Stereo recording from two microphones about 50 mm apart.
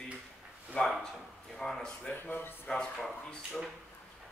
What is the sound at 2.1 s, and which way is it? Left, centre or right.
Speech, left.